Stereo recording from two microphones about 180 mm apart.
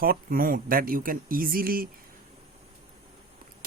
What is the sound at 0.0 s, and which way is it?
Speech, 55° right (ahead or behind).